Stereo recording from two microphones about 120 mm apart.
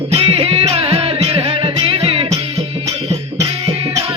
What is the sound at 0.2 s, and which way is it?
Music, 50° right (ahead or behind).